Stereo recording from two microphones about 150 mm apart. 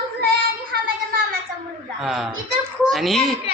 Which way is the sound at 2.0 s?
5° right (ahead or behind).